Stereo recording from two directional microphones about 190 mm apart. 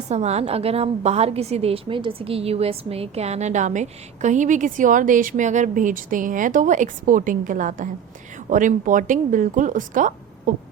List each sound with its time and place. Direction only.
0.1 s a woman's voice: 35° right (ahead or behind)